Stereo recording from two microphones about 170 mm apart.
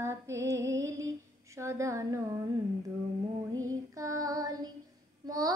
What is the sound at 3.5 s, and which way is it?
Child singing, 20° right (ahead or behind).